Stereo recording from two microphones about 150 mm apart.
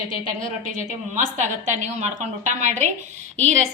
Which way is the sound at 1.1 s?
55° right (ahead or behind).